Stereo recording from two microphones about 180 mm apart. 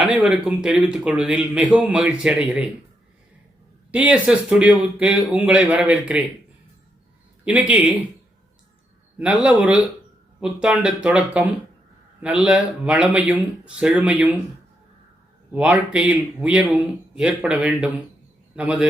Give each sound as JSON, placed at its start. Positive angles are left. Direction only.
{"t": 0.0, "sound": "speech", "side_deg": -5}
{"t": 3.9, "sound": "speech", "side_deg": -5}
{"t": 7.4, "sound": "speech", "side_deg": -10}
{"t": 9.1, "sound": "speech", "side_deg": -5}
{"t": 15.5, "sound": "speech", "side_deg": -10}